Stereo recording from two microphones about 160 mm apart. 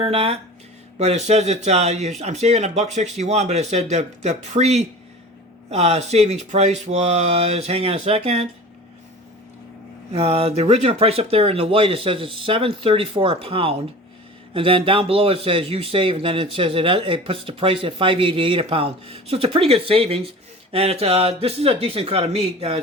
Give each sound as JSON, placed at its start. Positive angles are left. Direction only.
{"t": 0.0, "sound": "a man's voice", "side_deg": -35}
{"t": 10.1, "sound": "a man's voice", "side_deg": -40}